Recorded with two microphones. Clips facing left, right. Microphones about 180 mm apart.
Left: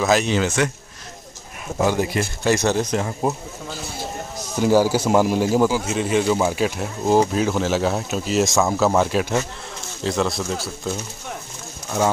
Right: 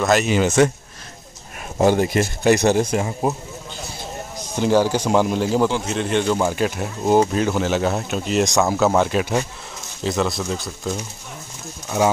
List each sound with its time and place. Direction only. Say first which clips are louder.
0.0 s a man's voice: right 1 dB; centre (ahead or behind)
2.1 s speech: right 4 dB; 15° right (ahead or behind)
4.6 s a man's voice: left 1 dB; 5° left (ahead or behind)